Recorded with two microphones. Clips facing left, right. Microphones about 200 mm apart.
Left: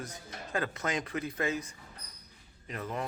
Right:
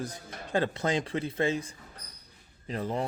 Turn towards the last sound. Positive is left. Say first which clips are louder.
# right 5 dB
turn(degrees=-30)  # may be behind; listen again after turning